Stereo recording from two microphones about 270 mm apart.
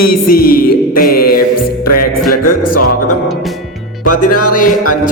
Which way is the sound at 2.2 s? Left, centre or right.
Left.